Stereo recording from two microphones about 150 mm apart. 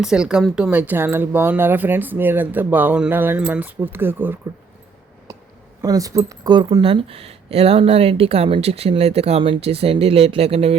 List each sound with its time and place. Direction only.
0.0 s speech: 5° right (ahead or behind)
5.3 s a sound: 20° right (ahead or behind)
5.8 s speech: 25° right (ahead or behind); by 10.8 s 40° right (ahead or behind)